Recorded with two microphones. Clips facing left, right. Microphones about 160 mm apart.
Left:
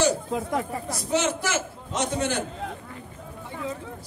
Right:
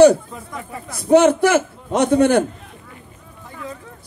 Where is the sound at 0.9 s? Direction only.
55° right (ahead or behind).